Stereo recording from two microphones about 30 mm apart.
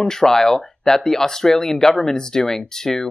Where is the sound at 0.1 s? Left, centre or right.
Centre.